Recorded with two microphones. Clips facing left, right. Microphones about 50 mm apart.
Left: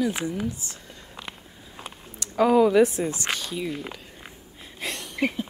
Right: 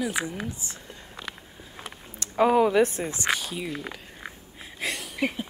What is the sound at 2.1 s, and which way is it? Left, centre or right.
Speech, right.